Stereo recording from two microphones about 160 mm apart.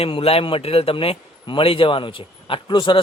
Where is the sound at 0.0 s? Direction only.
35° left (ahead or behind).